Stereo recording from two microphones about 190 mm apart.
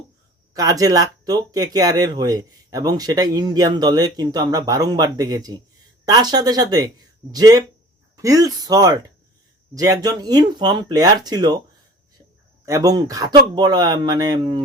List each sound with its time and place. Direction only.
0.5 s speech: 20° right (ahead or behind)
12.6 s speech: 20° right (ahead or behind)